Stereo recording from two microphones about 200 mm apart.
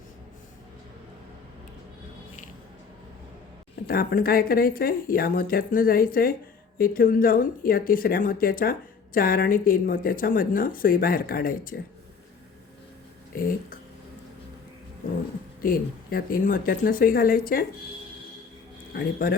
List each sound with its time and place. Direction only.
3.8 s speech: 45° left (ahead or behind)
15.6 s speech: 45° left (ahead or behind)
18.9 s speech: 50° left (ahead or behind)